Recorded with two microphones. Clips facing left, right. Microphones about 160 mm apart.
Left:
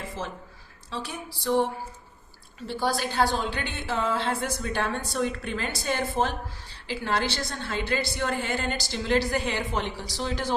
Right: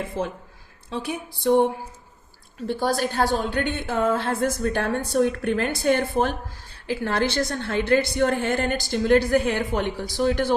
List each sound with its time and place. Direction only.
0.0 s a woman's voice: 55° right (ahead or behind)